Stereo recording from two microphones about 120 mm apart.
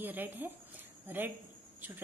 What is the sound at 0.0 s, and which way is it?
A woman's voice, 15° right (ahead or behind).